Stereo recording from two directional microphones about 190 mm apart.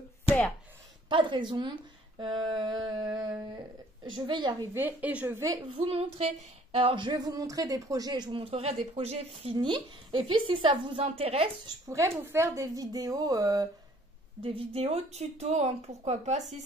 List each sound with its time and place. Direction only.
1.0 s speech: 25° right (ahead or behind)
4.7 s a woman's voice: 10° right (ahead or behind)
5.8 s speech: 30° right (ahead or behind)
11.9 s speech: 15° right (ahead or behind)
14.4 s a woman's voice: 30° right (ahead or behind)